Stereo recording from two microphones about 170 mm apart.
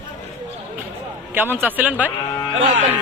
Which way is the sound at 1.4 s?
10° right (ahead or behind).